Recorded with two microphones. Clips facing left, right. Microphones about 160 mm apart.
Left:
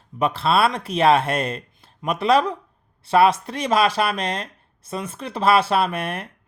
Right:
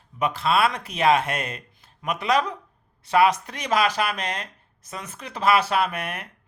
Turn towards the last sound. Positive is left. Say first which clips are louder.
# left 3 dB
turn(degrees=30)  # may be behind; listen again after turning